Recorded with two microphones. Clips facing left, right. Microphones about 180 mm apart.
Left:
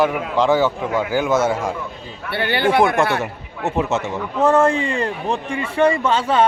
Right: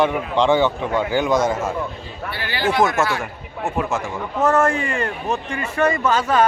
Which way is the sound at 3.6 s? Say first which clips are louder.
Left 3 dB; 20° left (ahead or behind).